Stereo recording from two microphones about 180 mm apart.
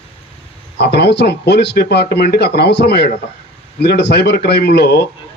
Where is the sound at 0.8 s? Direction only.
65° left (ahead or behind).